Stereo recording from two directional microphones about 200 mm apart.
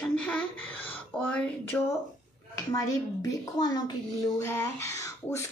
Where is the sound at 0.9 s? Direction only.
5° left (ahead or behind).